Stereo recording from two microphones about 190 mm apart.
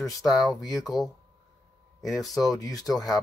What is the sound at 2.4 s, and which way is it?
Speech, 20° left (ahead or behind).